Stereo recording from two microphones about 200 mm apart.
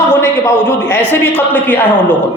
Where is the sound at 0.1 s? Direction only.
15° left (ahead or behind).